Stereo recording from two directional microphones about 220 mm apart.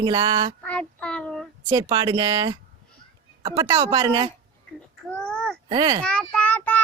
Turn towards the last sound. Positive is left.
turn(degrees=5)  # may be behind; listen again after turning